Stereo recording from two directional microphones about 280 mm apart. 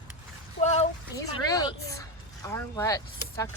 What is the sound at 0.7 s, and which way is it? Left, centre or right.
A woman's voice, centre.